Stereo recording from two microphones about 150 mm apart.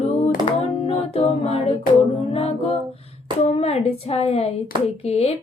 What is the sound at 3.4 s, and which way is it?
Speech, 45° left (ahead or behind).